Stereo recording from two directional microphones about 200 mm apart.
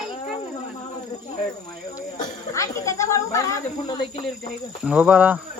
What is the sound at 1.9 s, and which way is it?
Snake, 15° left (ahead or behind).